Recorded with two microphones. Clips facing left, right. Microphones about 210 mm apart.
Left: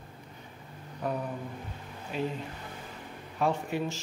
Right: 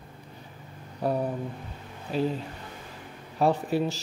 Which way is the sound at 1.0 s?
35° right (ahead or behind).